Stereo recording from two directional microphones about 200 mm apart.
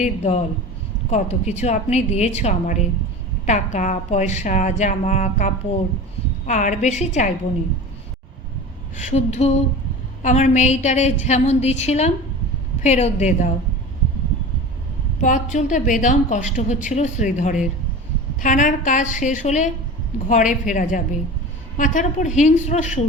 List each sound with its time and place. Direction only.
0.0 s a woman's voice: 35° left (ahead or behind)
9.0 s a woman's voice: 35° left (ahead or behind)
15.2 s a woman's voice: 40° left (ahead or behind)